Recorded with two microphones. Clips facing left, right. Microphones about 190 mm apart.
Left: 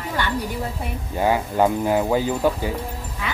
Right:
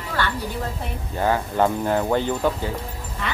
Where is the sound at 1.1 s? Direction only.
10° left (ahead or behind).